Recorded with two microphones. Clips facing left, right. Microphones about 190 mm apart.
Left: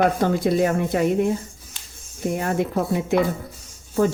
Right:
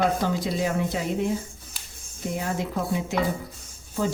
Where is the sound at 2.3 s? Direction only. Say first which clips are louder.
Left 5 dB; 60° left (ahead or behind).